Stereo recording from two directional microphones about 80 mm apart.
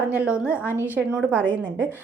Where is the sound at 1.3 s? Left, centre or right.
Centre.